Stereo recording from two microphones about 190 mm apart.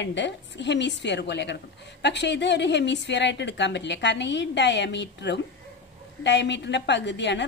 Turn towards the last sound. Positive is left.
turn(degrees=70)  # may be behind; listen again after turning